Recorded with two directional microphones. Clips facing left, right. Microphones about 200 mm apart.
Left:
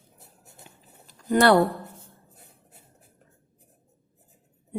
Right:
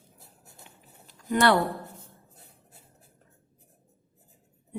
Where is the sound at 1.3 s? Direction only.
35° left (ahead or behind).